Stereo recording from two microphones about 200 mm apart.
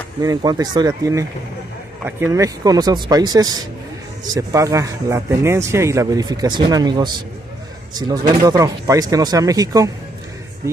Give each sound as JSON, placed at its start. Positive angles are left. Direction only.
{"t": 0.2, "sound": "a man's voice", "side_deg": -20}
{"t": 8.1, "sound": "speech", "side_deg": -20}